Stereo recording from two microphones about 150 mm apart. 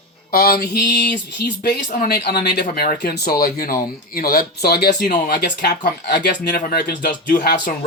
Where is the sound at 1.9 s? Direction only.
80° left.